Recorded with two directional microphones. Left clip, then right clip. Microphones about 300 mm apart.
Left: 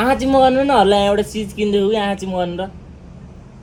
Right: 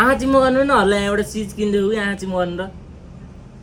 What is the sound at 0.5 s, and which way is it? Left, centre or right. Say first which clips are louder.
Speech: left 2 dB; centre.